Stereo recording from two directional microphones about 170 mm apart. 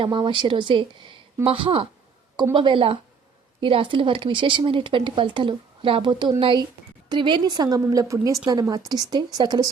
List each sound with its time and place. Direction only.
0.0 s speech: 30° right (ahead or behind)